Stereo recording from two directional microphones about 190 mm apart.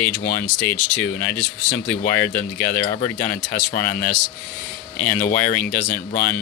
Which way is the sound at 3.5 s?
50° left (ahead or behind).